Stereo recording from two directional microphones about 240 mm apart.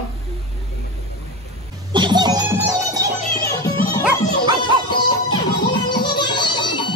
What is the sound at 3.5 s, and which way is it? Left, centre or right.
Music, centre.